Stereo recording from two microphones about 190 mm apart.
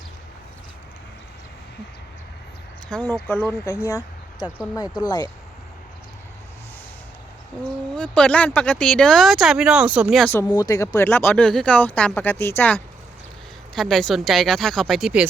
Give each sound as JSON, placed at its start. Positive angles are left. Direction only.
{"t": 2.9, "sound": "speech", "side_deg": 10}
{"t": 4.7, "sound": "speech", "side_deg": 20}
{"t": 7.9, "sound": "speech", "side_deg": 5}
{"t": 10.2, "sound": "speech", "side_deg": 15}